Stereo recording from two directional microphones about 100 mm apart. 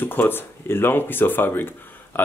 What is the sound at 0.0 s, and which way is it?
Speech, 20° left (ahead or behind).